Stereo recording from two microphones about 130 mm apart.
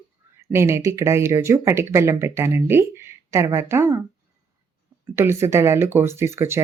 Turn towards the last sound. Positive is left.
turn(degrees=-20)  # may be behind; listen again after turning